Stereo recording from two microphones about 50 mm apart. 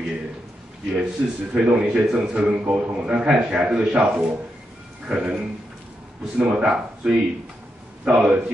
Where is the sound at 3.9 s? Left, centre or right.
Right.